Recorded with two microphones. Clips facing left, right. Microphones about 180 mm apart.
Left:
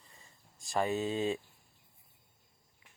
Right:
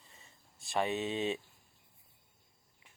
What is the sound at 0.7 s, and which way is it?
Speech, 20° right (ahead or behind).